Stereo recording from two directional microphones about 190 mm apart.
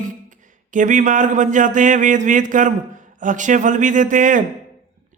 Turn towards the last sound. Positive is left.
turn(degrees=-45)  # may be behind; listen again after turning